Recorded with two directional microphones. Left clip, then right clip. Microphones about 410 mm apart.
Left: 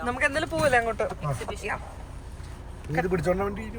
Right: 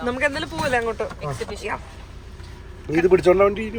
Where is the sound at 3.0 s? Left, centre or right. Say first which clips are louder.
Right 13 dB; centre.